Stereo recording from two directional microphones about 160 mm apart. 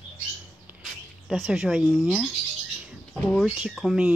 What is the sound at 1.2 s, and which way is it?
Speech, centre (ahead or behind).